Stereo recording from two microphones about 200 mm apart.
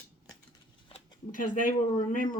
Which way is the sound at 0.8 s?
25° left (ahead or behind).